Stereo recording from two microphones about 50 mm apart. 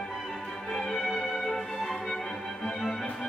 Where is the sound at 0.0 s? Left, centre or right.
Centre.